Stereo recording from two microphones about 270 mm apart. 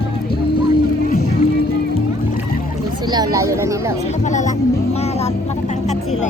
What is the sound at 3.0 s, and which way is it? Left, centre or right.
Speech, centre.